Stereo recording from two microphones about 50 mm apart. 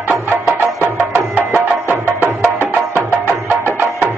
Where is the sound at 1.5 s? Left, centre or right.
Right.